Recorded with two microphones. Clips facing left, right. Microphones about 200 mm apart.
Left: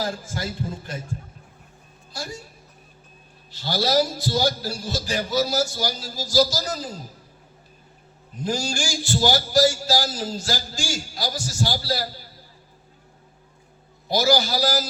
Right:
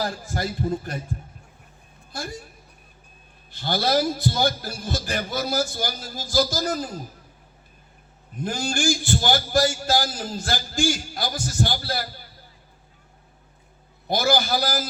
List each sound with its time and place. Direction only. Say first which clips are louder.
0.3 s a man's voice: right 7 dB; 50° right (ahead or behind)
2.1 s a man's voice: right 1 dB; 55° right (ahead or behind)
3.5 s a man's voice: even; 55° right (ahead or behind)
8.4 s a man's voice: even; 55° right (ahead or behind)
14.1 s a man's voice: left 1 dB; 55° right (ahead or behind)